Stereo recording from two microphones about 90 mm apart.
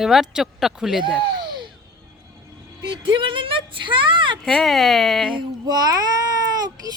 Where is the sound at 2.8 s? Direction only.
65° right (ahead or behind).